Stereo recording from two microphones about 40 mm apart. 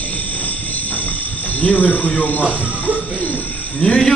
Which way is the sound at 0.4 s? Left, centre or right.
Left.